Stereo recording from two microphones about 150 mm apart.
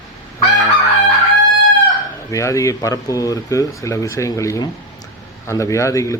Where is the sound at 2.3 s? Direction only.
20° left (ahead or behind).